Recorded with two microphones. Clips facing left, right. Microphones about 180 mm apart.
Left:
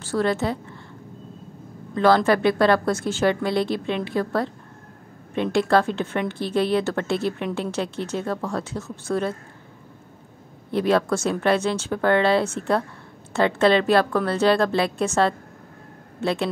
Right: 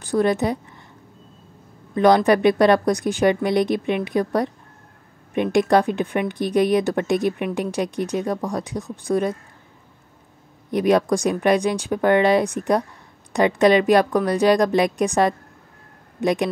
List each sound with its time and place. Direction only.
0.0 s speech: 15° right (ahead or behind)
2.0 s speech: 15° right (ahead or behind)
10.7 s speech: 15° right (ahead or behind)